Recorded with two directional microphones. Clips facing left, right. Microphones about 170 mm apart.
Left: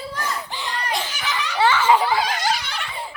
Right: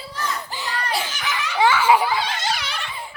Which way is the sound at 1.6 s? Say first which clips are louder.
Right 1 dB; 10° right (ahead or behind).